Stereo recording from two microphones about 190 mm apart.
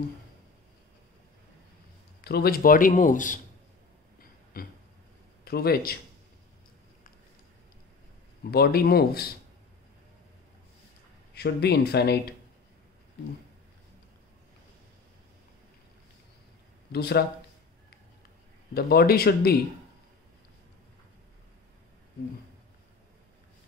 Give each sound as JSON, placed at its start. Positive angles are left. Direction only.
{"t": 2.2, "sound": "a man's voice", "side_deg": 55}
{"t": 4.6, "sound": "a sound", "side_deg": 50}
{"t": 5.4, "sound": "a man's voice", "side_deg": 55}
{"t": 8.5, "sound": "speech", "side_deg": 55}
{"t": 11.3, "sound": "speech", "side_deg": 60}
{"t": 16.9, "sound": "speech", "side_deg": 60}
{"t": 18.7, "sound": "speech", "side_deg": 55}